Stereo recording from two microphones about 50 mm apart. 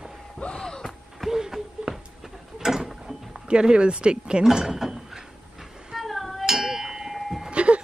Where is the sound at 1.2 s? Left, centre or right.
Centre.